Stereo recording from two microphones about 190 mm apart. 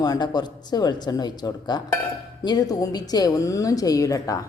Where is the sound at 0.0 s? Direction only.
20° left (ahead or behind).